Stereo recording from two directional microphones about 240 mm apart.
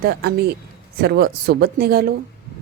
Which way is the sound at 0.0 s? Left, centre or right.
Right.